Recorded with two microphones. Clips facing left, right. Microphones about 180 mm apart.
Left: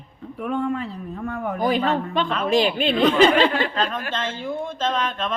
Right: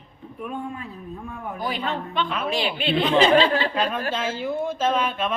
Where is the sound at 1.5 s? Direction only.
45° left (ahead or behind).